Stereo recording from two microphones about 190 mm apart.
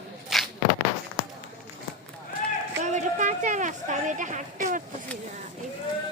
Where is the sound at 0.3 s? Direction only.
Centre (ahead or behind).